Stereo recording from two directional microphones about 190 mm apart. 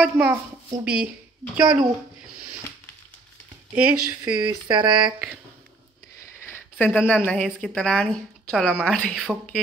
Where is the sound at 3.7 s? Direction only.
10° right (ahead or behind).